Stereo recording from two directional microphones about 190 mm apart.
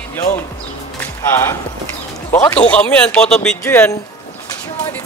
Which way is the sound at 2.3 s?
10° left (ahead or behind).